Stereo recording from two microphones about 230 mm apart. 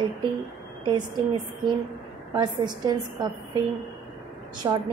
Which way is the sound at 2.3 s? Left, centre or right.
Centre.